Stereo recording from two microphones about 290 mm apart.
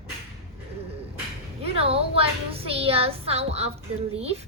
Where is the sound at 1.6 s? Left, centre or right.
Centre.